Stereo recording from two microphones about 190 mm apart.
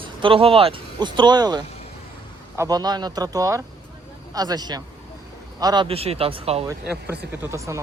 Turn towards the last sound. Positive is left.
turn(degrees=-15)  # may be behind; listen again after turning